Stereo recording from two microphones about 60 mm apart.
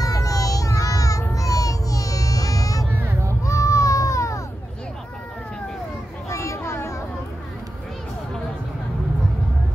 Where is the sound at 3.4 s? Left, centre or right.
Left.